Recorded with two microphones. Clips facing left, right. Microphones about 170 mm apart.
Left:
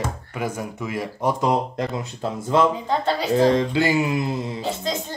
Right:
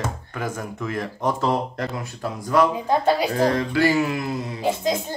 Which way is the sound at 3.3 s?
20° left (ahead or behind).